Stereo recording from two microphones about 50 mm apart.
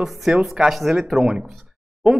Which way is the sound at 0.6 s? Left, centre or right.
Centre.